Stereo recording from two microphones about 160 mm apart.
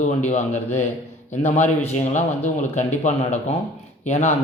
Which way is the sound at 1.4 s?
45° left (ahead or behind).